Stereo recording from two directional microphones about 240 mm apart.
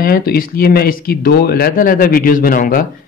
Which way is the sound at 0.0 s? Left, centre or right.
Left.